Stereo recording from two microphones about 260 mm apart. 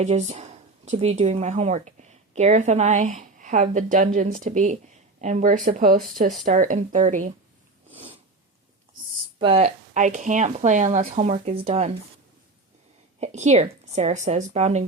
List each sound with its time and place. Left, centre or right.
0.0 s speech: right
7.9 s snort: right
9.4 s speech: right
13.1 s speech: right